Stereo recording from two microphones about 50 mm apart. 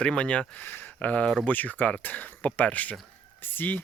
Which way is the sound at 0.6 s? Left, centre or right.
Left.